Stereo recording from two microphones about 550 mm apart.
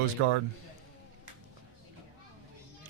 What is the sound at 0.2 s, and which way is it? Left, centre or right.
Speech, right.